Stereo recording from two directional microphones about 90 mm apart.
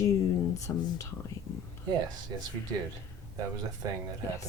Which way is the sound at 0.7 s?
25° left (ahead or behind).